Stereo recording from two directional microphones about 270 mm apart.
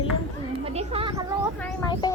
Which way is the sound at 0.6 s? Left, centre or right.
Right.